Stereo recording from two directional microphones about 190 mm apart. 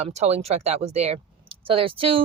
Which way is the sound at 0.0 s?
35° right (ahead or behind).